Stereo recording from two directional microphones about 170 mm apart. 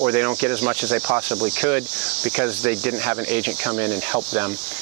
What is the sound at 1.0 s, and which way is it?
Speech, 25° right (ahead or behind).